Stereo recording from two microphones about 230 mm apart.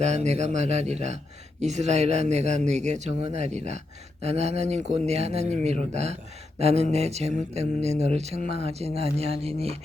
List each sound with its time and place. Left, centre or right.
0.0 s speech: right